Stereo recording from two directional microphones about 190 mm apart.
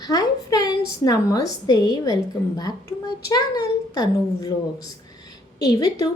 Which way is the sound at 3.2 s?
20° left (ahead or behind).